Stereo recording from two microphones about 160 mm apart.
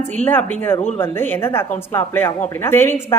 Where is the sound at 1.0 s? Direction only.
15° left (ahead or behind).